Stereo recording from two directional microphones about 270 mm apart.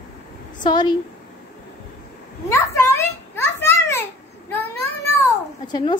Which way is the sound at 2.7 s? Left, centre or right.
Centre.